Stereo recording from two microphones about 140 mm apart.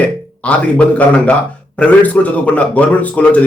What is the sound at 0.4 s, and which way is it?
Speech, 10° left (ahead or behind).